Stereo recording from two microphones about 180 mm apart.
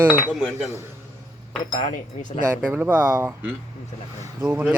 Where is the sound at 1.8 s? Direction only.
45° left (ahead or behind).